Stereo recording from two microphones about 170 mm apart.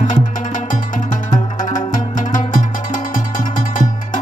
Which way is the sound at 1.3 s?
50° left (ahead or behind).